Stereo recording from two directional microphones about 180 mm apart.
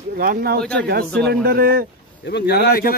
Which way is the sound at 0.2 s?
55° right (ahead or behind).